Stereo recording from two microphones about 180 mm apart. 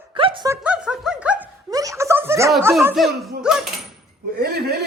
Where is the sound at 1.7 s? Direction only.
20° right (ahead or behind).